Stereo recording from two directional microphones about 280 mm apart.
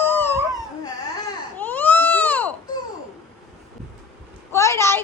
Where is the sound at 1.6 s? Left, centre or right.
Centre.